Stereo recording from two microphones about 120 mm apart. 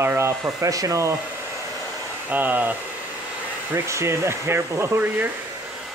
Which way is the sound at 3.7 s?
20° right (ahead or behind).